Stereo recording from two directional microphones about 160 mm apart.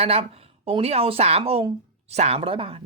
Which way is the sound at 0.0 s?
35° right (ahead or behind).